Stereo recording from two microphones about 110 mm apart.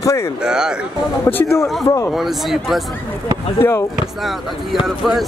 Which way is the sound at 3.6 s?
25° left (ahead or behind).